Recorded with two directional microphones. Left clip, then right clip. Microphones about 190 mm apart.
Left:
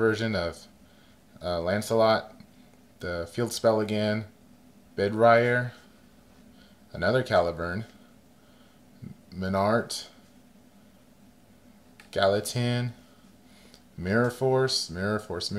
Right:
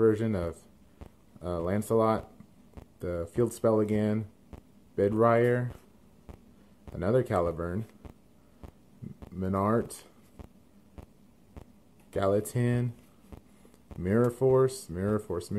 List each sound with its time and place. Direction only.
0.0 s speech: 20° right (ahead or behind)
7.0 s speech: 20° right (ahead or behind)
9.4 s speech: 20° right (ahead or behind)
12.1 s speech: 20° right (ahead or behind)
14.0 s speech: 20° right (ahead or behind)